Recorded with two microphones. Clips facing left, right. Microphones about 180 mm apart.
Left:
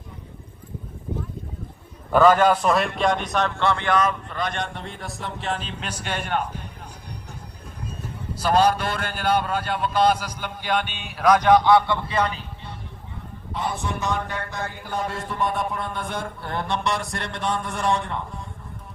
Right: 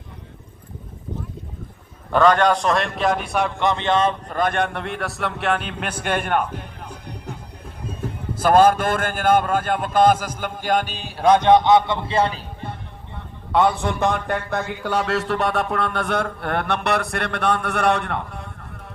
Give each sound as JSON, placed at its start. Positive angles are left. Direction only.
{"t": 2.1, "sound": "a man's voice", "side_deg": 5}
{"t": 4.3, "sound": "a man's voice", "side_deg": -50}
{"t": 8.4, "sound": "a man's voice", "side_deg": -50}
{"t": 13.1, "sound": "a man's voice", "side_deg": -70}
{"t": 14.7, "sound": "mantra", "side_deg": -80}